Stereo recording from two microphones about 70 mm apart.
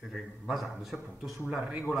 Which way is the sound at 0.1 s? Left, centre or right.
Centre.